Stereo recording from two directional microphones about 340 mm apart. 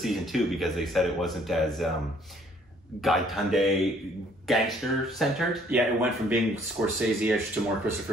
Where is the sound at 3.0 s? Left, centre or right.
Centre.